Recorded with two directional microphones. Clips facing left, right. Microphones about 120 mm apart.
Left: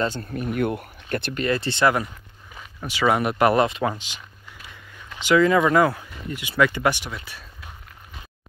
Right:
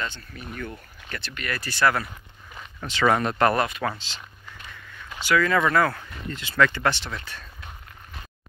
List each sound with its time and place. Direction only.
0.2 s speech: 50° left (ahead or behind)
1.3 s speech: 25° left (ahead or behind)
2.5 s speech: 10° left (ahead or behind)
3.6 s speech: 25° left (ahead or behind)
3.9 s a sound: 15° left (ahead or behind)
5.2 s speech: 20° left (ahead or behind)